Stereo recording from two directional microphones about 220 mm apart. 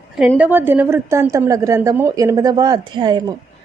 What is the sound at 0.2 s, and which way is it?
A woman's voice, 5° right (ahead or behind).